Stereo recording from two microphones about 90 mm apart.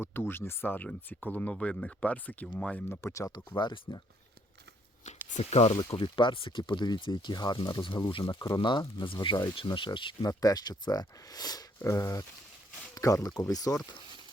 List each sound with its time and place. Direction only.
0.0 s speech: 25° left (ahead or behind)
2.9 s speech: 35° left (ahead or behind)
3.5 s speech: 55° left (ahead or behind)
5.9 s speech: 70° left (ahead or behind)
10.2 s speech: 45° left (ahead or behind)
11.8 s speech: 35° left (ahead or behind)